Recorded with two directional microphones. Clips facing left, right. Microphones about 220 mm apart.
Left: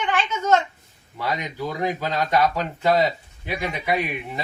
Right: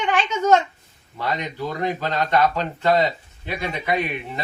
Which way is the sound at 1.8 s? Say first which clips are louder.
Right 1 dB; 10° left (ahead or behind).